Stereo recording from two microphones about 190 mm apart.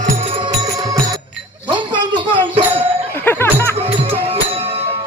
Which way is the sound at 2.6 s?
10° right (ahead or behind).